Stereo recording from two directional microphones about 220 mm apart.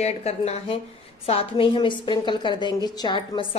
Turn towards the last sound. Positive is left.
turn(degrees=20)  # may be behind; listen again after turning